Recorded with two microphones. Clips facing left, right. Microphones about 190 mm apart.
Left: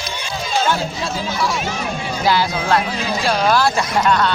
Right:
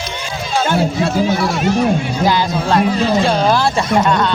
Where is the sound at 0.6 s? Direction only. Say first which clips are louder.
Right 5 dB; 55° right (ahead or behind).